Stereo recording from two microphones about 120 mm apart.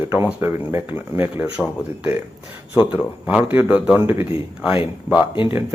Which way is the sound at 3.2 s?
15° right (ahead or behind).